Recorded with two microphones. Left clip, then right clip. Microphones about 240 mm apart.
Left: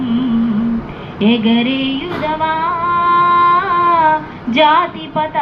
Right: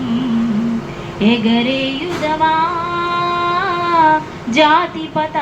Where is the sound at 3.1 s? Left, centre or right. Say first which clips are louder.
Left 7 dB; right.